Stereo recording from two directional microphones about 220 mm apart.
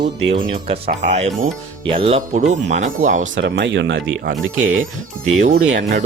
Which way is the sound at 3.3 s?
55° right (ahead or behind).